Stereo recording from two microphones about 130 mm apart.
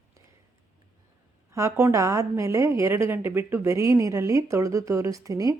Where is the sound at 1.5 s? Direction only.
20° right (ahead or behind).